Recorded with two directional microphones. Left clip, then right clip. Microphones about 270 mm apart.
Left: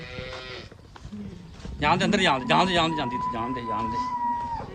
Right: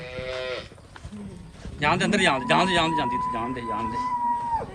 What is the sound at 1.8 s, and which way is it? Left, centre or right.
A man's voice, centre.